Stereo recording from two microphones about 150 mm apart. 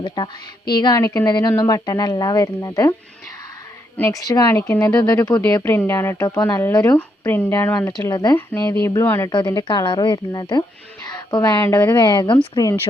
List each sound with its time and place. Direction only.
0.2 s a woman's voice: 30° left (ahead or behind)
3.9 s a woman's voice: 20° left (ahead or behind)
9.3 s a woman's voice: 30° left (ahead or behind)